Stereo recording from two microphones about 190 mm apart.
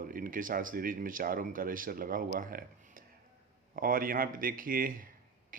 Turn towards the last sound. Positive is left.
turn(degrees=-45)  # may be behind; listen again after turning